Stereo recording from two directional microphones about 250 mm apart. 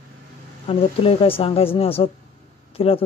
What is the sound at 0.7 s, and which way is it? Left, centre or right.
Speech, left.